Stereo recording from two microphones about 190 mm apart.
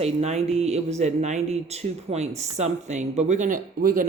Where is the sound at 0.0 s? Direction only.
35° right (ahead or behind).